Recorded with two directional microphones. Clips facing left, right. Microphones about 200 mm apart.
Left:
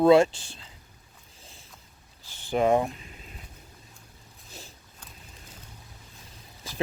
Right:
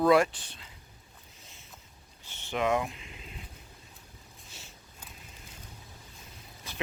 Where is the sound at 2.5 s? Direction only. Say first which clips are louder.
Left 6 dB; 35° left (ahead or behind).